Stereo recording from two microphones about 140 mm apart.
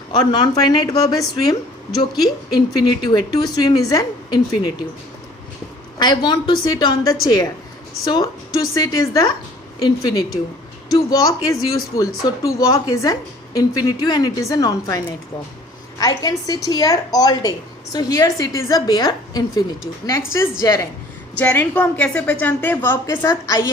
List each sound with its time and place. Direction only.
0.1 s speech: 30° left (ahead or behind)
3.0 s speech: 30° left (ahead or behind)
6.0 s a woman's voice: 30° left (ahead or behind); by 23.2 s 15° left (ahead or behind)
23.2 s speech: 25° left (ahead or behind)